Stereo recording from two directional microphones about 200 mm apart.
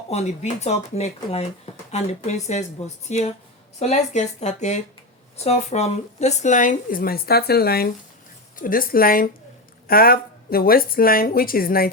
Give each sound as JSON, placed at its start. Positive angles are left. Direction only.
{"t": 0.1, "sound": "a woman's voice", "side_deg": 35}